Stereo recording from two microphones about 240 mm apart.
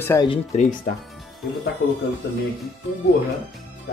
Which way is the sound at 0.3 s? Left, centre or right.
Left.